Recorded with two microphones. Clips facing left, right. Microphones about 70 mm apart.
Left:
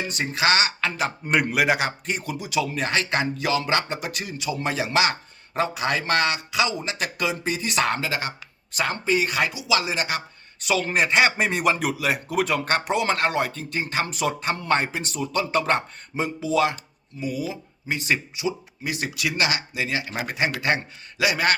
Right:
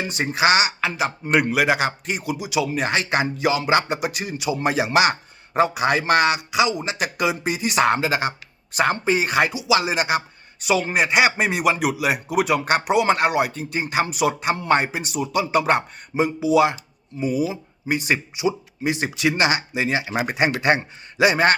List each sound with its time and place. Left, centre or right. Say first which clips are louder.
0.0 s speech: right 4 dB; right